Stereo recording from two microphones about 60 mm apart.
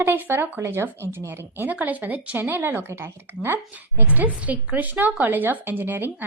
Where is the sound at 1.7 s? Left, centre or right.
Right.